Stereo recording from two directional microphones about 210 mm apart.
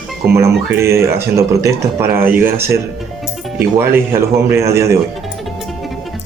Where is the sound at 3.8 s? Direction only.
10° right (ahead or behind).